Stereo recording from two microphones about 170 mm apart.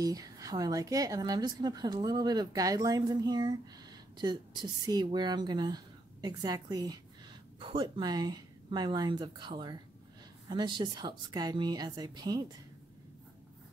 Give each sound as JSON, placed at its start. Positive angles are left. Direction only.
{"t": 0.0, "sound": "a woman's voice", "side_deg": -20}